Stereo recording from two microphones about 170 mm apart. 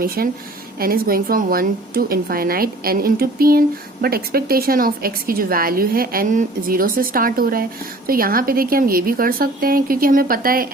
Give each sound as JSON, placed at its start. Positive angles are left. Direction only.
{"t": 0.2, "sound": "a woman's voice", "side_deg": -60}